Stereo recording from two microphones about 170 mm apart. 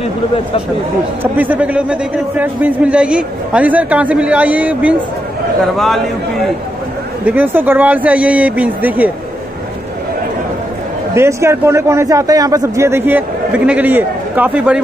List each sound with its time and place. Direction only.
1.2 s a man's voice: 10° right (ahead or behind)
7.2 s a man's voice: 10° right (ahead or behind)
11.1 s a man's voice: 15° right (ahead or behind)